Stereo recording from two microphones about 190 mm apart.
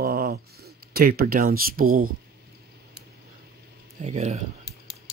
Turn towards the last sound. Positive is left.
turn(degrees=-35)  # may be behind; listen again after turning